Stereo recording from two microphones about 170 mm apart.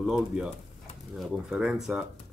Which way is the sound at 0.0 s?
Centre (ahead or behind).